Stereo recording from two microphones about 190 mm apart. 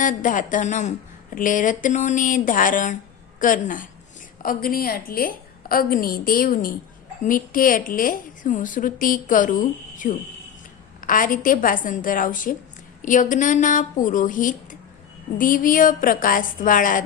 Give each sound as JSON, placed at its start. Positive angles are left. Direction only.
{"t": 0.0, "sound": "a woman's voice", "side_deg": 45}